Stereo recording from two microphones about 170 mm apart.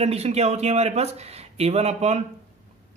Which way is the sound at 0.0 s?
40° right (ahead or behind).